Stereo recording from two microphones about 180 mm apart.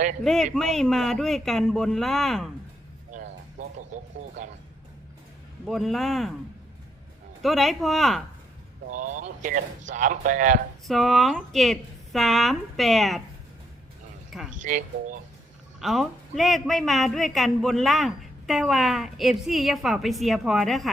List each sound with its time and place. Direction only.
0.5 s a woman's voice: 5° left (ahead or behind)
3.1 s speech: 45° right (ahead or behind)
5.6 s a woman's voice: centre (ahead or behind)
7.4 s a woman's voice: centre (ahead or behind)
8.9 s speech: 45° right (ahead or behind)
10.8 s a woman's voice: centre (ahead or behind)
14.6 s speech: 45° right (ahead or behind)
15.8 s a woman's voice: centre (ahead or behind)